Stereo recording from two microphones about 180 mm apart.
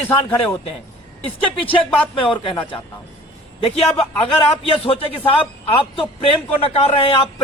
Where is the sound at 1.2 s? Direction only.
30° left (ahead or behind).